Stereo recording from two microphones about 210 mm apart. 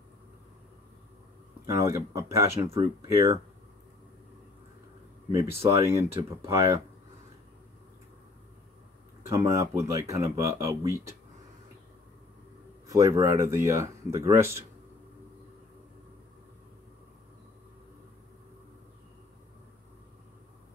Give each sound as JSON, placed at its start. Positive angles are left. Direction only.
{"t": 1.7, "sound": "speech", "side_deg": -15}
{"t": 5.7, "sound": "speech", "side_deg": -15}
{"t": 9.3, "sound": "speech", "side_deg": -15}
{"t": 12.8, "sound": "speech", "side_deg": -15}